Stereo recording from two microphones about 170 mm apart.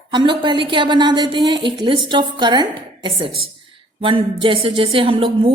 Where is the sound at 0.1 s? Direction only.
30° right (ahead or behind).